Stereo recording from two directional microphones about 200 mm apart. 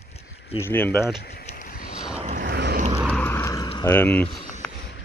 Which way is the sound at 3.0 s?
10° left (ahead or behind).